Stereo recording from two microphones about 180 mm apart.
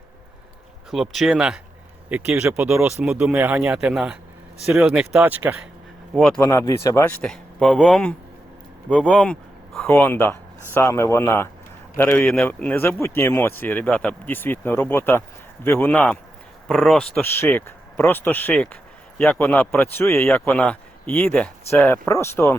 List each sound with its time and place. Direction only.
0.9 s speech: centre (ahead or behind)
6.1 s speech: centre (ahead or behind)
6.4 s speech: 15° left (ahead or behind)
17.2 s speech: 15° left (ahead or behind)